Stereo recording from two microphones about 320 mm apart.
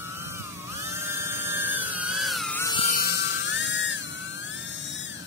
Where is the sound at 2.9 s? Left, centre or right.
Left.